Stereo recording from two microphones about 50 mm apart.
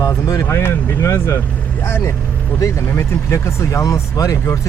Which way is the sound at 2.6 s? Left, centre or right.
Left.